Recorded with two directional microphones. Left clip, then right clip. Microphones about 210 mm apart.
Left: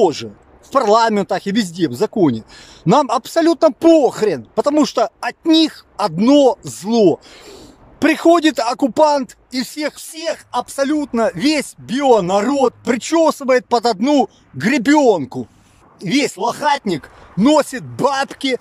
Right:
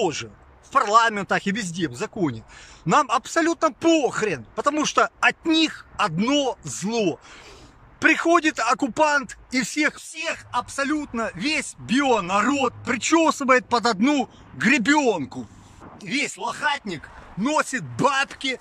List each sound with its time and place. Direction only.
0.0 s speech: 25° left (ahead or behind)